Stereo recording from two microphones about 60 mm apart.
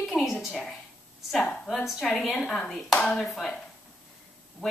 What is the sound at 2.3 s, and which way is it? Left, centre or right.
A woman's voice, centre.